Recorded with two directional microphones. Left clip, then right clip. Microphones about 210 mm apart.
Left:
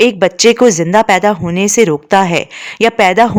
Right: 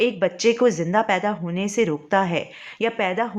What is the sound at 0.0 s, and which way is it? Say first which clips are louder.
Speech: left 11 dB; 55° left (ahead or behind).